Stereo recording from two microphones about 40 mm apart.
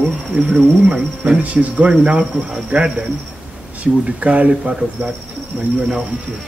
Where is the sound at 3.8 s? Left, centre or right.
Right.